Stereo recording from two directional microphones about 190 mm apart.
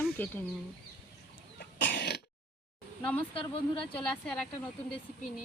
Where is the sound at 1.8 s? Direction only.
65° left (ahead or behind).